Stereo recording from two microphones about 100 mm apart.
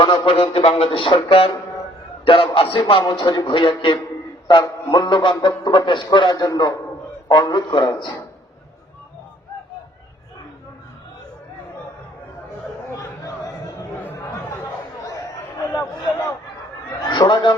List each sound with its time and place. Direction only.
0.0 s a man's voice: 55° left (ahead or behind)
0.5 s speech: 70° left (ahead or behind)
3.2 s a man's voice: 50° left (ahead or behind)
13.0 s a sound: 35° left (ahead or behind)
14.0 s chatter: 20° left (ahead or behind)
15.7 s a sound: 30° left (ahead or behind)
17.1 s a man's voice: 50° left (ahead or behind)